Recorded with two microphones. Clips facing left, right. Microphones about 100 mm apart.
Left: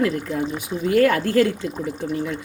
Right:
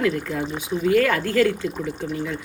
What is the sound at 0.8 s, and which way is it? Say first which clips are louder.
Speech: left 2 dB; 40° left (ahead or behind).